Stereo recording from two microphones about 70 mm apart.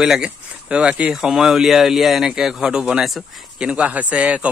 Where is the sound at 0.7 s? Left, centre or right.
Centre.